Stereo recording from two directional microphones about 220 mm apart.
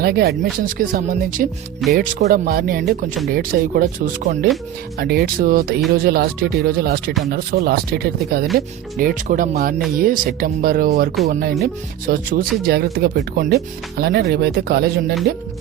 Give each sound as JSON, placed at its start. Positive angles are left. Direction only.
{"t": 0.0, "sound": "speech", "side_deg": -45}